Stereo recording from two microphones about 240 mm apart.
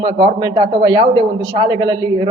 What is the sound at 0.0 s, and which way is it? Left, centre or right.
A man's voice, centre.